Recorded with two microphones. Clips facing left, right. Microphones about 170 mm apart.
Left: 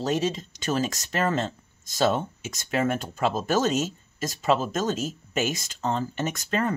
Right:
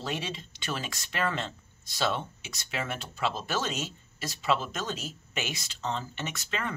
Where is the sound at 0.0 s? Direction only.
40° left (ahead or behind).